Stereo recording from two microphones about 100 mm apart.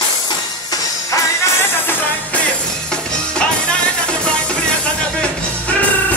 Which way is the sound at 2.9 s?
10° left (ahead or behind).